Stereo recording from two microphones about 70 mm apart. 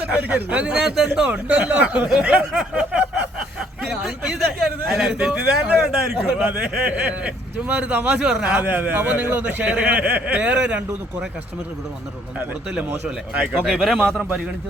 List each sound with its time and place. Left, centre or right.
0.0 s speech: right
0.8 s a man's voice: centre
2.4 s a man's voice: centre
4.0 s a man's voice: centre
6.4 s a man's voice: centre
8.5 s speech: right
13.3 s speech: centre
13.7 s speech: centre